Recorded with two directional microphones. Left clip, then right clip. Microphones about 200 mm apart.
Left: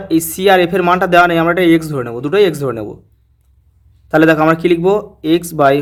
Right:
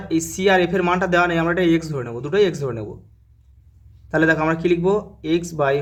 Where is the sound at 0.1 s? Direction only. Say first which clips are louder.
Left 7 dB; 30° left (ahead or behind).